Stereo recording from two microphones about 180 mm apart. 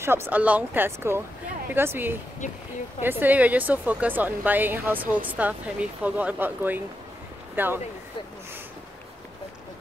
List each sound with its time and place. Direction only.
0.0 s speech: 15° right (ahead or behind)